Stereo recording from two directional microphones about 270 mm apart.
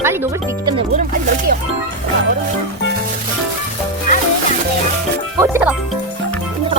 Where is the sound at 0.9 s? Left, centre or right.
Right.